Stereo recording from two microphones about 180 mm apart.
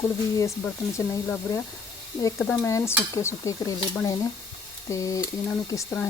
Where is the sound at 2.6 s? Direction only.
15° left (ahead or behind).